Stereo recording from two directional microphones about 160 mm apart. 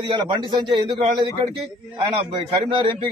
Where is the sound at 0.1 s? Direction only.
30° right (ahead or behind).